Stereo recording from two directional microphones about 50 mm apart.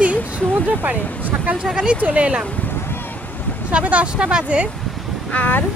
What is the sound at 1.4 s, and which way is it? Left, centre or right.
Speech, right.